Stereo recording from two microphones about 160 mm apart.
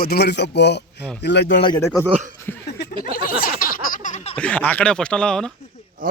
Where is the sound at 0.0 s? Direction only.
85° left.